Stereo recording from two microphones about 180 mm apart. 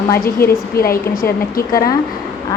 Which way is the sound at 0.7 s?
55° left (ahead or behind).